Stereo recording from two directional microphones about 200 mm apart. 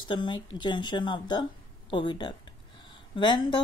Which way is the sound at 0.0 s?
25° left (ahead or behind).